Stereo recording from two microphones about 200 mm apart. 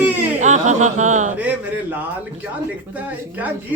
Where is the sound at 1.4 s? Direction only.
10° right (ahead or behind).